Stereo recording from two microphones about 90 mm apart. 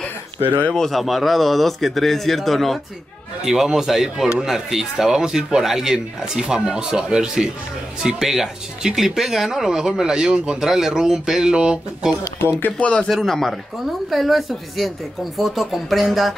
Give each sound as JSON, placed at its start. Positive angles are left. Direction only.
{"t": 0.6, "sound": "speech", "side_deg": 10}
{"t": 12.5, "sound": "speech", "side_deg": 15}
{"t": 13.1, "sound": "speech", "side_deg": 0}